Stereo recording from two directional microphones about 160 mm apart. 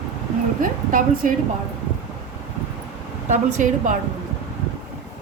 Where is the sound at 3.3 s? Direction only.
50° right (ahead or behind).